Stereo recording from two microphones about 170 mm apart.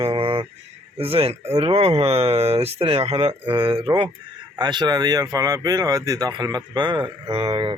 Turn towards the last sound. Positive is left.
turn(degrees=-30)  # may be behind; listen again after turning